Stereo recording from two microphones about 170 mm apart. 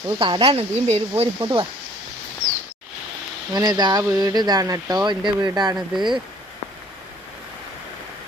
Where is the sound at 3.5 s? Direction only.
25° right (ahead or behind).